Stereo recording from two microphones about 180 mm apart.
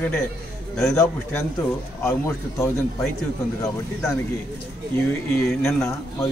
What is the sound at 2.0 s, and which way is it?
Speech, 15° left (ahead or behind).